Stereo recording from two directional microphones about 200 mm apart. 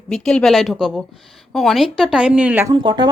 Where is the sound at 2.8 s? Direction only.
20° right (ahead or behind).